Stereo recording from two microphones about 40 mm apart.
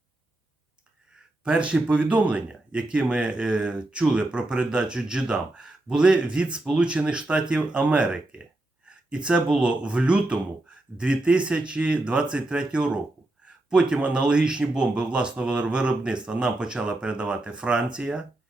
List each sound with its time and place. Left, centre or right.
1.5 s speech: right